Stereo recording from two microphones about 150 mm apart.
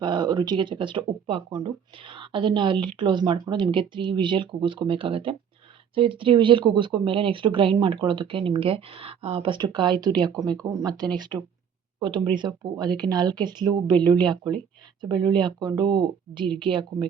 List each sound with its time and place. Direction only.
0.0 s speech: 30° right (ahead or behind)